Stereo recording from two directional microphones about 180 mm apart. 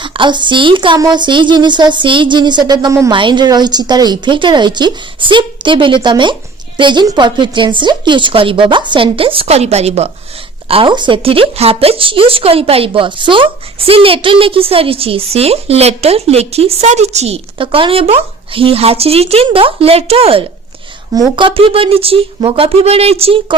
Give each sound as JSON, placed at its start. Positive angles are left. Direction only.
{"t": 0.0, "sound": "speech", "side_deg": -25}